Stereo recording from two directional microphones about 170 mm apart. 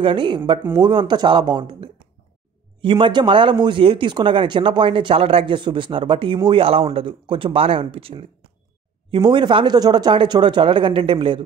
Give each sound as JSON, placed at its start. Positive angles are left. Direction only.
{"t": 0.0, "sound": "speech", "side_deg": -30}